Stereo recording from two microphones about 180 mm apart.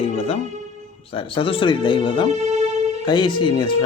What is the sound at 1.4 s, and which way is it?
Speech, 30° left (ahead or behind).